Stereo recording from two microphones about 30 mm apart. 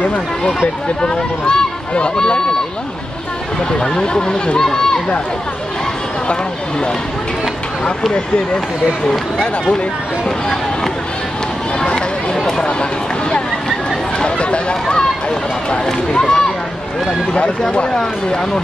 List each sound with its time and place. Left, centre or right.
1.0 s speech: left
3.8 s speech: left
14.2 s speech: left
17.9 s speech: left